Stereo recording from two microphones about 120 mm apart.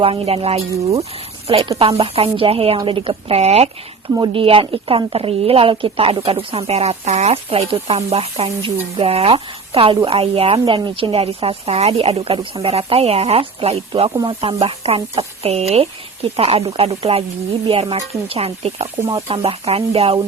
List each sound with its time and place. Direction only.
0.0 s a woman's voice: 50° right (ahead or behind)
4.2 s a woman's voice: 45° right (ahead or behind)